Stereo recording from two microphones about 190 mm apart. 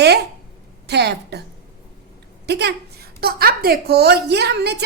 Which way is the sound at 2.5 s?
60° right (ahead or behind).